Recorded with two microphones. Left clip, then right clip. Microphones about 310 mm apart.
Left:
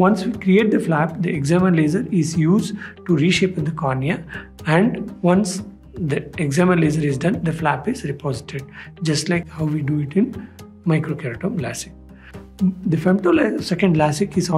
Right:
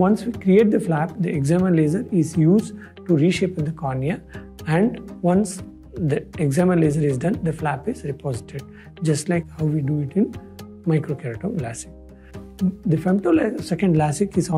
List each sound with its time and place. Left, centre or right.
0.0 s speech: right
6.0 s speech: right
12.9 s speech: right